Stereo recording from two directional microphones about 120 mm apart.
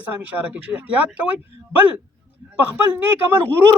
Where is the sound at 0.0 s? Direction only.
10° right (ahead or behind).